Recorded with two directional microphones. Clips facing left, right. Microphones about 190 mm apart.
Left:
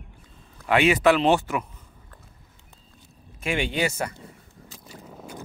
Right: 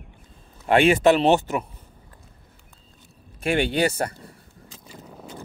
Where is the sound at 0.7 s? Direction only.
30° right (ahead or behind).